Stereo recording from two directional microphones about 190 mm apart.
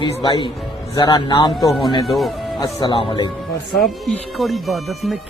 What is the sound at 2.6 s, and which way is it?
Speech, 25° left (ahead or behind).